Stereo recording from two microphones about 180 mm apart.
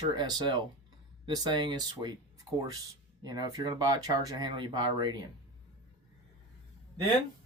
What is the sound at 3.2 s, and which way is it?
Speech, 20° right (ahead or behind).